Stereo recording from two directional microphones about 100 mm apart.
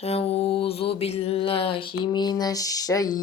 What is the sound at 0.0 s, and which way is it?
Mantra, 85° left.